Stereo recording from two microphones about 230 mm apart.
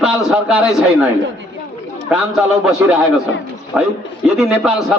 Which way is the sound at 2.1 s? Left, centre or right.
Centre.